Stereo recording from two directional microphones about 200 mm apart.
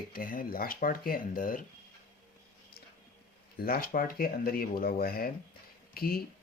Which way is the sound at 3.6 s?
45° left (ahead or behind).